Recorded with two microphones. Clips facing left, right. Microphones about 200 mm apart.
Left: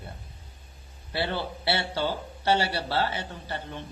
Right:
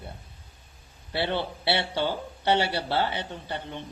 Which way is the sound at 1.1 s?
20° right (ahead or behind).